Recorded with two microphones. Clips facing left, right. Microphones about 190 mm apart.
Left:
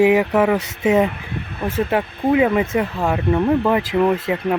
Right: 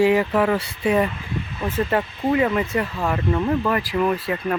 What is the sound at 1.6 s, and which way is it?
Speech, 10° left (ahead or behind).